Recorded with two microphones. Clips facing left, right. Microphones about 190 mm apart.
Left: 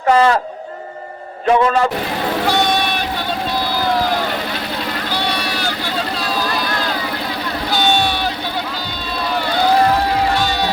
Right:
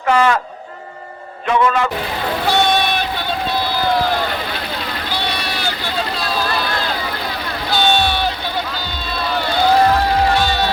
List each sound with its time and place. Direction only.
0.1 s a man's voice: 35° left (ahead or behind)
1.5 s a man's voice: 35° left (ahead or behind)